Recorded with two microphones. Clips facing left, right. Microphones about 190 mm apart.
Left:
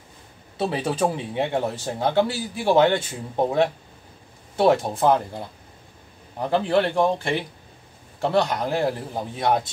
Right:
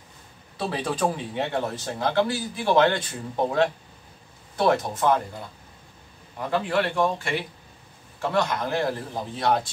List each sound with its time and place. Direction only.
0.6 s a man's voice: 25° left (ahead or behind)
4.6 s speech: 25° left (ahead or behind)
6.5 s a man's voice: 30° left (ahead or behind)
8.5 s a man's voice: 15° left (ahead or behind)